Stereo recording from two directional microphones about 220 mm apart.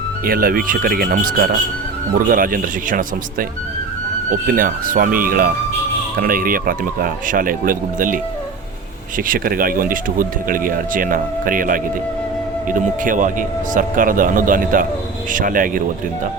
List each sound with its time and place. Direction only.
0.3 s speech: 40° right (ahead or behind)